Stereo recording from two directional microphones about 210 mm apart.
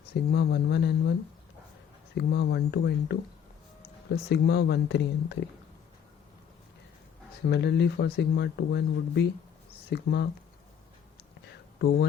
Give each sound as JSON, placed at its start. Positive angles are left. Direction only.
{"t": 0.1, "sound": "speech", "side_deg": 50}
{"t": 2.1, "sound": "speech", "side_deg": 50}
{"t": 7.5, "sound": "speech", "side_deg": 55}